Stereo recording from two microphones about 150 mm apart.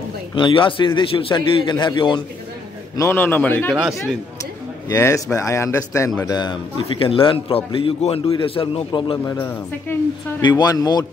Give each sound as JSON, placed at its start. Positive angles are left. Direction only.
{"t": 0.4, "sound": "a man's voice", "side_deg": 35}
{"t": 3.0, "sound": "a man's voice", "side_deg": 15}
{"t": 4.8, "sound": "a man's voice", "side_deg": 20}